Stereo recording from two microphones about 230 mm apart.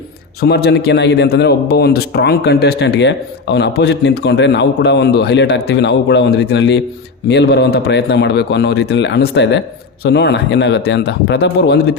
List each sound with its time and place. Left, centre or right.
0.4 s a man's voice: left